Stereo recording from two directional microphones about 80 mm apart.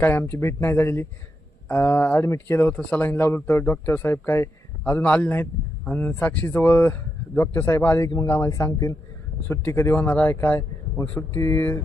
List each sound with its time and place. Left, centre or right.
0.0 s speech: left
4.9 s speech: centre
8.4 s speech: left